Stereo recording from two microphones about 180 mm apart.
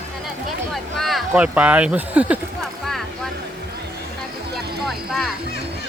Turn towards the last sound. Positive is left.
turn(degrees=0)  # may be behind; listen again after turning